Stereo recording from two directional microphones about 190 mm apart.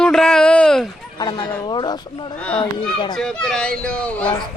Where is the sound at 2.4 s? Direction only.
5° left (ahead or behind).